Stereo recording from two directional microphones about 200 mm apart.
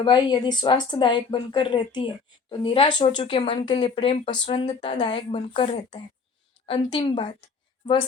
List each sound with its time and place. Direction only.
0.0 s a woman's voice: 20° left (ahead or behind)